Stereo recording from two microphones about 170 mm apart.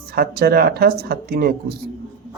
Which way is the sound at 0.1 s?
65° right (ahead or behind).